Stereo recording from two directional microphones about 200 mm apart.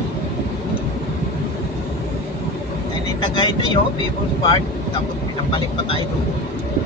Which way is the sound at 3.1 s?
25° left (ahead or behind).